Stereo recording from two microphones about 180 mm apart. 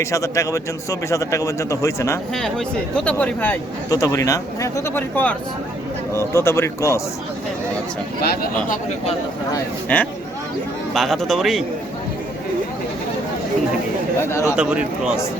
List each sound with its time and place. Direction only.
0.0 s speech: 15° left (ahead or behind)
2.3 s speech: 5° left (ahead or behind)
8.2 s speech: 60° left (ahead or behind)
9.9 s speech: 10° left (ahead or behind)
14.2 s speech: 15° left (ahead or behind)
14.5 s speech: 5° right (ahead or behind)